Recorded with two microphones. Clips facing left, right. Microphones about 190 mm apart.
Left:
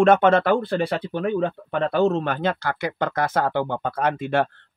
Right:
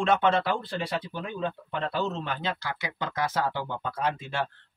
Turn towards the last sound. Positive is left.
turn(degrees=55)  # may be behind; listen again after turning